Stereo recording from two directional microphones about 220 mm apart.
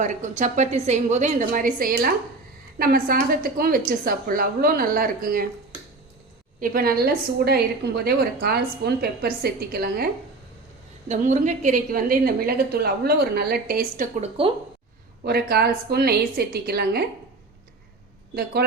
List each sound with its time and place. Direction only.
0.0 s a woman's voice: 35° right (ahead or behind)
6.6 s a woman's voice: 40° right (ahead or behind)
11.1 s a woman's voice: 35° right (ahead or behind)